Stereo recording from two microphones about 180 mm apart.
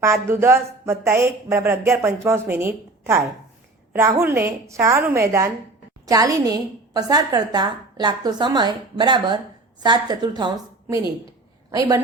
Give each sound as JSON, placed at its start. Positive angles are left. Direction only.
{"t": 0.0, "sound": "a woman's voice", "side_deg": -15}